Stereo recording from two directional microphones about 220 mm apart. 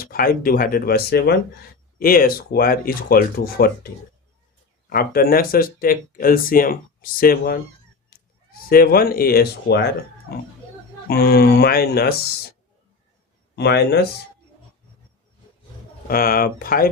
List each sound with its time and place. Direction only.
0.0 s speech: 40° left (ahead or behind)
4.9 s speech: 45° left (ahead or behind)
8.1 s a sound: 45° left (ahead or behind)
8.5 s speech: 40° left (ahead or behind)
11.1 s speech: 45° left (ahead or behind)
13.6 s speech: 50° left (ahead or behind)
16.0 s speech: 40° left (ahead or behind)